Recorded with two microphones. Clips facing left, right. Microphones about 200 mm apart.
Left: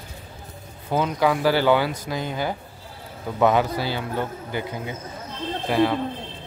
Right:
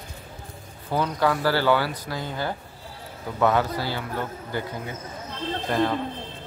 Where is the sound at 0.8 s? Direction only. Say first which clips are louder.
Left 2 dB; 20° left (ahead or behind).